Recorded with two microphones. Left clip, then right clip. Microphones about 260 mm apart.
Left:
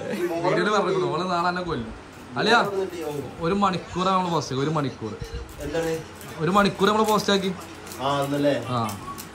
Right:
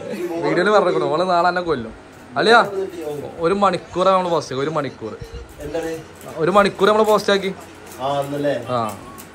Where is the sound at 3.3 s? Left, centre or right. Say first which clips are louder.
Right 7 dB; centre.